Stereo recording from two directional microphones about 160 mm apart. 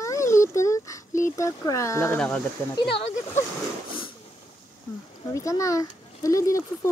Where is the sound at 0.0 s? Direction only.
20° left (ahead or behind).